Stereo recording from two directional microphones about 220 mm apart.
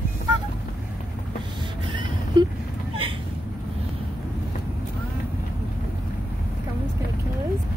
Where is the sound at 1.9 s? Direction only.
20° right (ahead or behind).